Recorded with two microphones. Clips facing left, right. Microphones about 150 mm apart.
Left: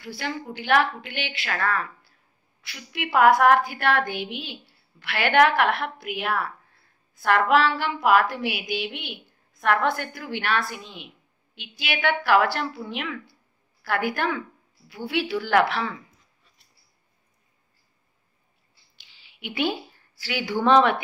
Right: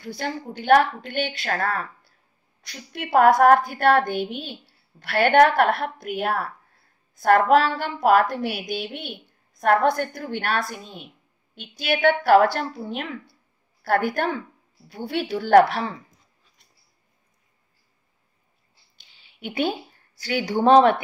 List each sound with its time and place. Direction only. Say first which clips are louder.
0.0 s a woman's voice: right 2 dB; 40° right (ahead or behind)
19.4 s a woman's voice: right 1 dB; 45° right (ahead or behind)